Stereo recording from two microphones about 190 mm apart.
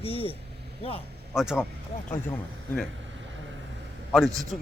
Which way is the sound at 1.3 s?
5° right (ahead or behind).